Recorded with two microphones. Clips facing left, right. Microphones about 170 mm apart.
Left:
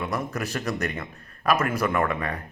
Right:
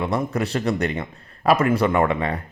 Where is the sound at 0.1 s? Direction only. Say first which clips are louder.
Right 6 dB; 30° right (ahead or behind).